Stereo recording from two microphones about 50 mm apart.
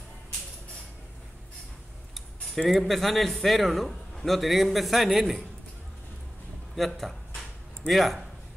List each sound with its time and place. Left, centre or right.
2.1 s a man's voice: centre
7.9 s a man's voice: centre